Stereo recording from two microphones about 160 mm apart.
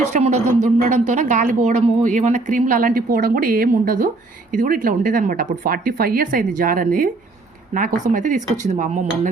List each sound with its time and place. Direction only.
0.0 s a woman's voice: 45° right (ahead or behind)